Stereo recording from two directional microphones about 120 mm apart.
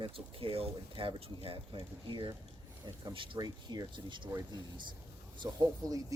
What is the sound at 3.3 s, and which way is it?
Speech, 35° right (ahead or behind).